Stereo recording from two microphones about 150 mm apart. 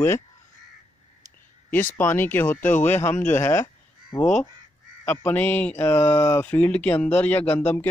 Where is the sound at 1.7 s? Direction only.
15° left (ahead or behind).